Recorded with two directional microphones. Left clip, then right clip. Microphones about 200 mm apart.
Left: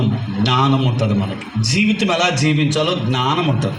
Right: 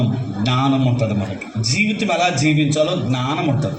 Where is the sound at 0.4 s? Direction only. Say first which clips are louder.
Left 2 dB; 55° left (ahead or behind).